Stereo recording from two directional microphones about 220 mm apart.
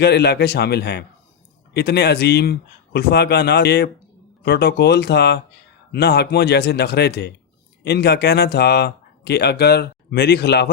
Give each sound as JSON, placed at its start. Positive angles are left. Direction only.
{"t": 0.0, "sound": "speech", "side_deg": 50}